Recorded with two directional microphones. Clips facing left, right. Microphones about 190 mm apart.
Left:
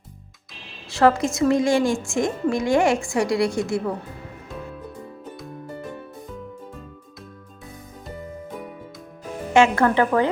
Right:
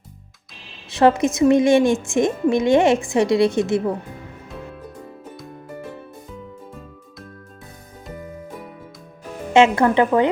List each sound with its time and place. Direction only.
0.9 s a woman's voice: 20° right (ahead or behind)
9.5 s a woman's voice: 20° right (ahead or behind)